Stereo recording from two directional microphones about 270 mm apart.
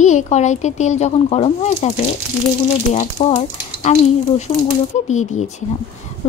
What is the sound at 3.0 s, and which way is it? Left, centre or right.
Speech, left.